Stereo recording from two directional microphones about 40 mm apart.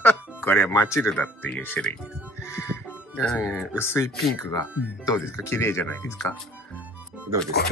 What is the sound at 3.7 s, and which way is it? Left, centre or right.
Speech, left.